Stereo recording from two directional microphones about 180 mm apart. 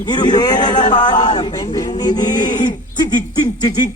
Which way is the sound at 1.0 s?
25° left (ahead or behind).